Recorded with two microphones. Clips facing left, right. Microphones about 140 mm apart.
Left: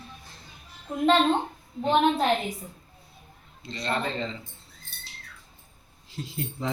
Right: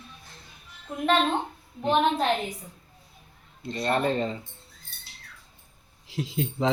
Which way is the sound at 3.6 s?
50° right (ahead or behind).